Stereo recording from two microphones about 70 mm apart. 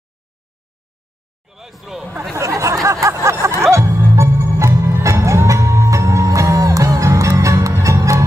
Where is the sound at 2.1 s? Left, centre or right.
Right.